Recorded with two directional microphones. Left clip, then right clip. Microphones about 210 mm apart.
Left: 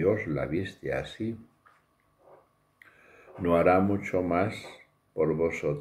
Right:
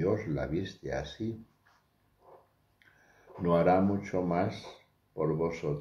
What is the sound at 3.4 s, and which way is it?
Speech, 5° left (ahead or behind).